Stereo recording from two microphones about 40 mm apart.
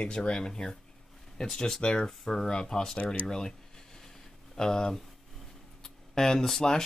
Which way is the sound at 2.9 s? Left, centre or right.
Left.